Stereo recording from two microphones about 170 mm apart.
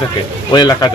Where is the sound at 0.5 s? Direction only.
25° left (ahead or behind).